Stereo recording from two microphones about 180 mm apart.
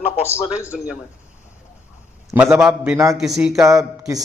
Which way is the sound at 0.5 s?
5° right (ahead or behind).